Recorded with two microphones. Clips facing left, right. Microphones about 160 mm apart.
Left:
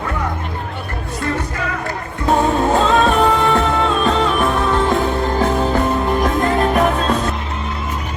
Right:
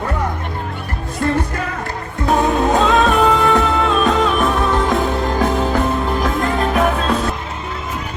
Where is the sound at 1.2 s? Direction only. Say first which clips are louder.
Right 4 dB; 40° right (ahead or behind).